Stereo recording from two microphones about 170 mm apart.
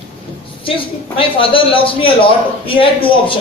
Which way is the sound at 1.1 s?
30° left (ahead or behind).